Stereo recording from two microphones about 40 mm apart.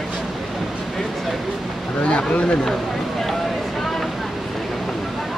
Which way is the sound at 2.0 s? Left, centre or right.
Left.